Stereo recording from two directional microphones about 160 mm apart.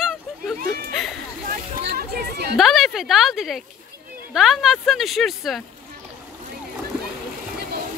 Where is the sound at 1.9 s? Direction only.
85° right.